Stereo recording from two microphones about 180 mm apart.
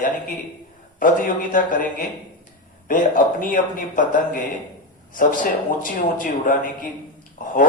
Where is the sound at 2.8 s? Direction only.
50° left (ahead or behind).